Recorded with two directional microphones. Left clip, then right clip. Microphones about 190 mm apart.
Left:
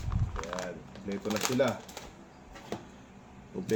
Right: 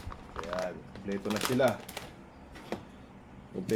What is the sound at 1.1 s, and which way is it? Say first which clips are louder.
Speech: even; 5° left (ahead or behind).